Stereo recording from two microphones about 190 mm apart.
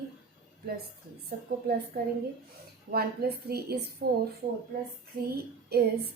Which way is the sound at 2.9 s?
55° right (ahead or behind).